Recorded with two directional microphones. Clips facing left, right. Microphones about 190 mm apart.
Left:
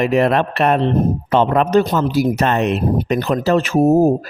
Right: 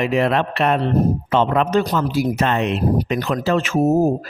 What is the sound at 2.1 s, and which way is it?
Speech, 40° left (ahead or behind).